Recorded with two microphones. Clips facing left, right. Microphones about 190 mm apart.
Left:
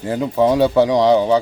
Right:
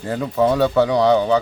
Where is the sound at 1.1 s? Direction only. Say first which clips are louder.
Left 2 dB; 30° left (ahead or behind).